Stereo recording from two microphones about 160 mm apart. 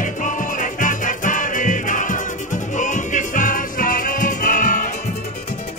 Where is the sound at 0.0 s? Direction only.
55° left (ahead or behind).